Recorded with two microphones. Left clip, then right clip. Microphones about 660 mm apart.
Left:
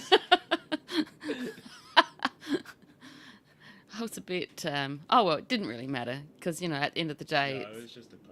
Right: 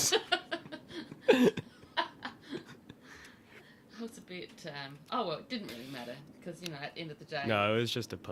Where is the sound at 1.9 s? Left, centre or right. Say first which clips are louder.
Left 12 dB; left.